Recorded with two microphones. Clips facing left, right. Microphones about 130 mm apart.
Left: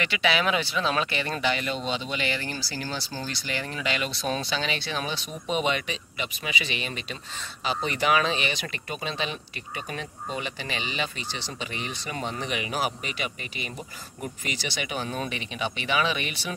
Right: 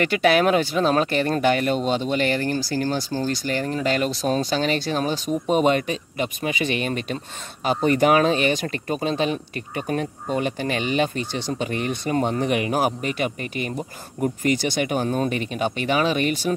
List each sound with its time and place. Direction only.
0.0 s speech: 50° right (ahead or behind)